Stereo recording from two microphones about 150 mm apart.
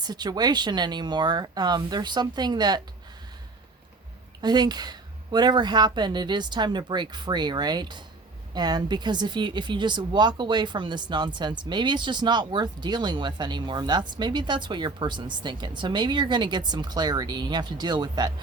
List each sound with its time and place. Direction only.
0.0 s a woman's voice: 25° right (ahead or behind)
4.4 s a woman's voice: 30° right (ahead or behind)